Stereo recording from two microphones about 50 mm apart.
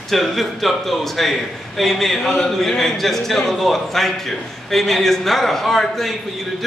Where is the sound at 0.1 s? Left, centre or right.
Centre.